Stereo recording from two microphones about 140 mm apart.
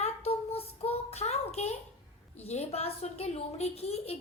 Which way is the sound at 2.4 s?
50° left (ahead or behind).